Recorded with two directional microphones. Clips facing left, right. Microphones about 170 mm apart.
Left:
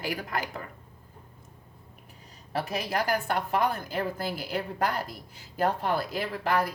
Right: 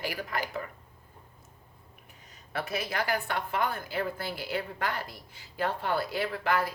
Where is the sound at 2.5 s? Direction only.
35° left (ahead or behind).